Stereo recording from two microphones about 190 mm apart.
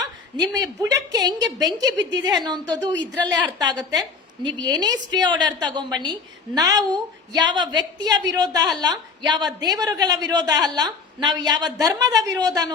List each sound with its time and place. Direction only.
0.0 s a woman's voice: 20° right (ahead or behind)